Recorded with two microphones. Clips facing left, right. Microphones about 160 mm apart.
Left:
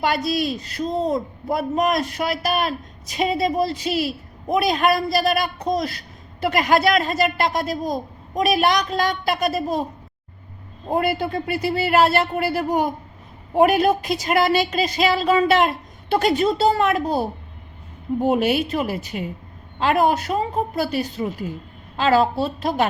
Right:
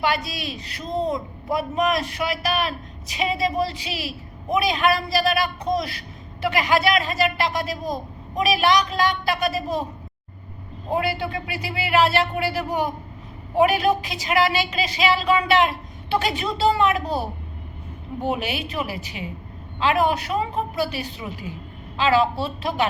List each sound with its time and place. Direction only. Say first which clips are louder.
0.0 s a man's voice: left 4 dB; 45° left (ahead or behind)
10.9 s a man's voice: left 3 dB; 45° left (ahead or behind)
18.3 s a man's voice: left 7 dB; 45° left (ahead or behind)